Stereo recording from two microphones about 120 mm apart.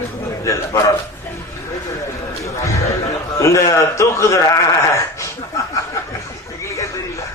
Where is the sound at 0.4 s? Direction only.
25° left (ahead or behind).